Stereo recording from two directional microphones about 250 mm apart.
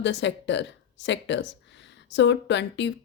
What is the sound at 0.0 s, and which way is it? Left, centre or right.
Speech, left.